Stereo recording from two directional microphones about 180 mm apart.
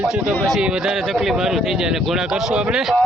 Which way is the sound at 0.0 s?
5° right (ahead or behind).